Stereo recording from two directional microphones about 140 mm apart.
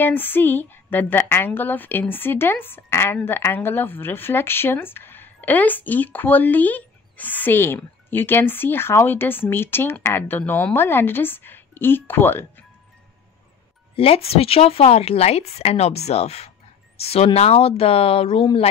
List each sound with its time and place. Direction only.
0.0 s speech: 15° left (ahead or behind)
13.9 s speech: 45° left (ahead or behind)